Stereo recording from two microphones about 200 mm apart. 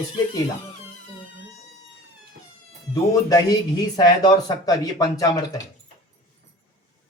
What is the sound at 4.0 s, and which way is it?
Speech, 20° left (ahead or behind).